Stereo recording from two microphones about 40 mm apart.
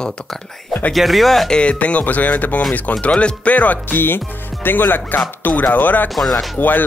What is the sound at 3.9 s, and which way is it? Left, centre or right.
Speech, left.